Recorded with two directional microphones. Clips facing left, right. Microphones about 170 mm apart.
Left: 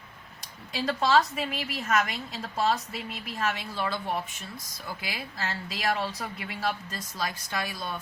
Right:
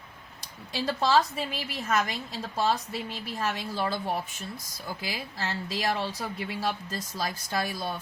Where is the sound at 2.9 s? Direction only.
35° right (ahead or behind).